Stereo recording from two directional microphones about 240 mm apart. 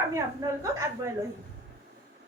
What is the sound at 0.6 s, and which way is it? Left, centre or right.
Speech, centre.